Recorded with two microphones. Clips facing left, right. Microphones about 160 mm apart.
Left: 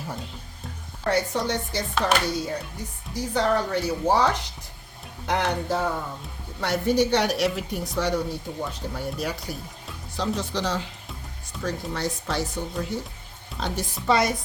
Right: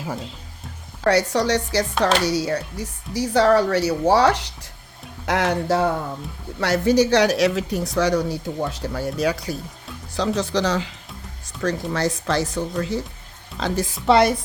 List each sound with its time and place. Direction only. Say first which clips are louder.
1.0 s speech: right 6 dB; 85° right
5.2 s speech: right 4 dB; 90° right